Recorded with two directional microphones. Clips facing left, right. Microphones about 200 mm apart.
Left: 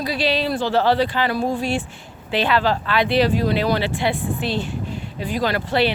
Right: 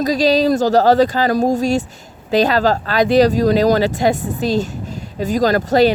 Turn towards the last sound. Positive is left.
turn(degrees=-40)  # may be behind; listen again after turning